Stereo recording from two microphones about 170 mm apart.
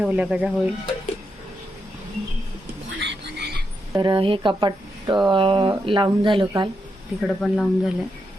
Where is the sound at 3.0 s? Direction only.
85° right.